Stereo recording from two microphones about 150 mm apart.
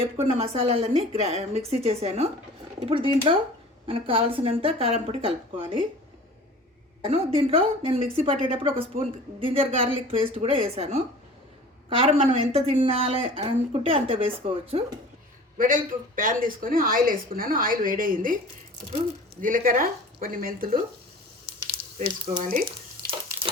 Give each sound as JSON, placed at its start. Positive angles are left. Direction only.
{"t": 0.0, "sound": "a woman's voice", "side_deg": -40}
{"t": 7.0, "sound": "a woman's voice", "side_deg": -40}
{"t": 15.5, "sound": "speech", "side_deg": -65}
{"t": 19.4, "sound": "speech", "side_deg": -65}
{"t": 21.9, "sound": "speech", "side_deg": -60}